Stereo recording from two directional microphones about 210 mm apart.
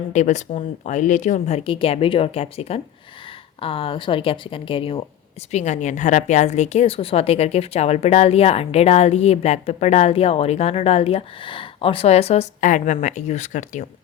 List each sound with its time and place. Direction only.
0.1 s a woman's voice: 35° left (ahead or behind)